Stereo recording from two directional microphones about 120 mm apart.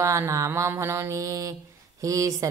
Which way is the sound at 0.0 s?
25° right (ahead or behind).